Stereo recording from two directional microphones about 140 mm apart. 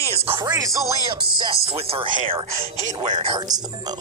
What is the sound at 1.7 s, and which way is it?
Speech, 40° right (ahead or behind).